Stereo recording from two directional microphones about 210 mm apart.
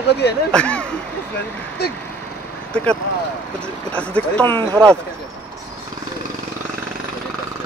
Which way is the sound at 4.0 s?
5° left (ahead or behind).